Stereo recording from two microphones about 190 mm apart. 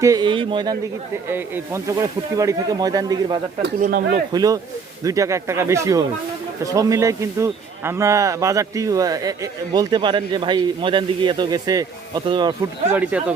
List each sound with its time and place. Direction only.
0.0 s a man's voice: 20° right (ahead or behind)
1.3 s speech: 10° right (ahead or behind)
3.8 s speech: 45° right (ahead or behind)
4.3 s a man's voice: 20° right (ahead or behind)
12.9 s speech: 5° right (ahead or behind)